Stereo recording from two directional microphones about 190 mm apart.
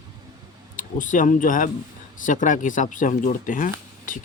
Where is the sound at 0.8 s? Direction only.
45° left (ahead or behind).